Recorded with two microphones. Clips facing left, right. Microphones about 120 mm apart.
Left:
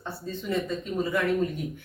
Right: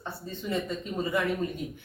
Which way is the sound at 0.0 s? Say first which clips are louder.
Left 2 dB; 15° right (ahead or behind).